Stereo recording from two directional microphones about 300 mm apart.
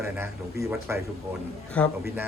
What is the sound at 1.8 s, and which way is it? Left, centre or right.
Speech, centre.